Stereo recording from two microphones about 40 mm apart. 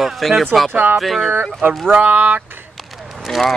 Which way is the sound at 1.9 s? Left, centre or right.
Right.